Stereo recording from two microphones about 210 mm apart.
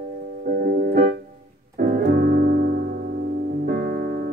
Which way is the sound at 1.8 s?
40° right (ahead or behind).